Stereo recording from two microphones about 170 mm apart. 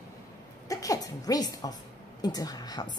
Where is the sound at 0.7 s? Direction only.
20° left (ahead or behind).